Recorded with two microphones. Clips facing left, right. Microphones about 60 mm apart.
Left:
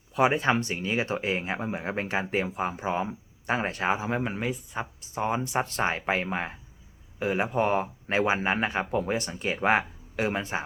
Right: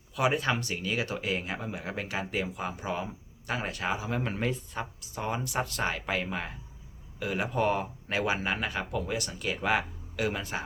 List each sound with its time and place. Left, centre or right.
0.1 s speech: left
4.2 s speech: centre
4.9 s speech: left